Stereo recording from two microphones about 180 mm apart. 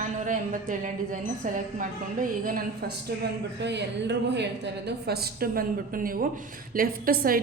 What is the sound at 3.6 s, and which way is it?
Speech, 75° right (ahead or behind).